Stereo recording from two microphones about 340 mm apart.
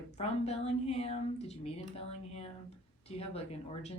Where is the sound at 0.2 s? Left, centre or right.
Centre.